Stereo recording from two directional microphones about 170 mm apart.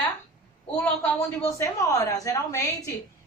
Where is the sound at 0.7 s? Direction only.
10° left (ahead or behind).